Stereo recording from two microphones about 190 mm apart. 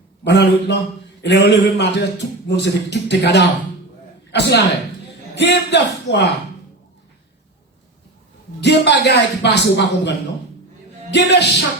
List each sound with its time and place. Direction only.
0.3 s a man's voice: 65° left (ahead or behind)
8.6 s speech: 65° left (ahead or behind)
11.1 s speech: 65° left (ahead or behind)